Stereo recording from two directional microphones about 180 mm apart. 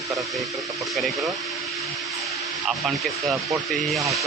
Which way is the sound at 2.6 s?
Centre (ahead or behind).